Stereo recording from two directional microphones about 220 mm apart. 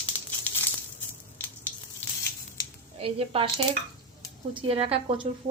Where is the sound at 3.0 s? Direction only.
25° right (ahead or behind).